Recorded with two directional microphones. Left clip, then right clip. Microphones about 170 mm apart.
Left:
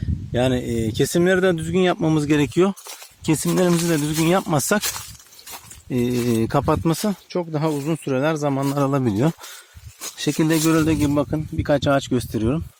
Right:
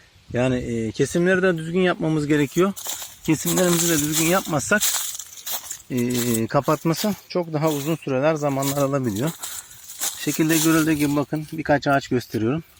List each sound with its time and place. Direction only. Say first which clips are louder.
0.3 s speech: left 2 dB; 25° left (ahead or behind)
3.7 s speech: even; 40° left (ahead or behind)
4.2 s speech: left 2 dB; 50° left (ahead or behind)
5.9 s speech: left 2 dB; 45° left (ahead or behind); by 7.8 s 25° left (ahead or behind)
7.9 s speech: right 1 dB; 40° left (ahead or behind)